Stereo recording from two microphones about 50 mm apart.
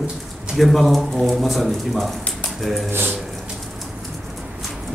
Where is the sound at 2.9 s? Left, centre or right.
Right.